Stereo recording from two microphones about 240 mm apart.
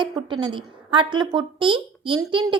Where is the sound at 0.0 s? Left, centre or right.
Centre.